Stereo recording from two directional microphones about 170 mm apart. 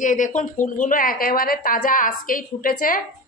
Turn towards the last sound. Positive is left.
turn(degrees=55)  # may be behind; listen again after turning